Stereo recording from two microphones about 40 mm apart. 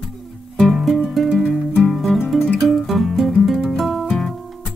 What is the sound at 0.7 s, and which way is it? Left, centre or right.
Music, centre.